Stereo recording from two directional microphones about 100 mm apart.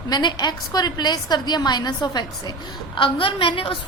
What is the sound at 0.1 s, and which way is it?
A woman's voice, 45° left (ahead or behind).